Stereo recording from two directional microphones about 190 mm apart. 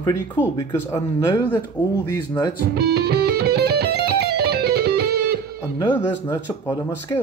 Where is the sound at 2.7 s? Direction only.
60° right (ahead or behind).